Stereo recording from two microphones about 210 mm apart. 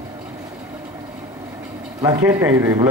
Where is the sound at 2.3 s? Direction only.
15° right (ahead or behind).